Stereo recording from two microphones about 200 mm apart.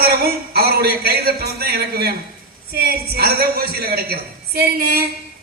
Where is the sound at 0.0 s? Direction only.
50° right (ahead or behind).